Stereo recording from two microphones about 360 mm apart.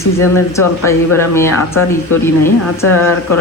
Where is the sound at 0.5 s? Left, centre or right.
Centre.